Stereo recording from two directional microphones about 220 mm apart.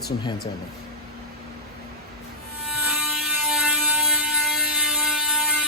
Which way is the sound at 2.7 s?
Centre (ahead or behind).